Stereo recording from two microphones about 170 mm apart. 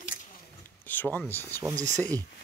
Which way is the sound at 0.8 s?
10° left (ahead or behind).